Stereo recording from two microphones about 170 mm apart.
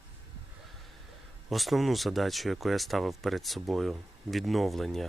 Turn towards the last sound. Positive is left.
turn(degrees=0)  # may be behind; listen again after turning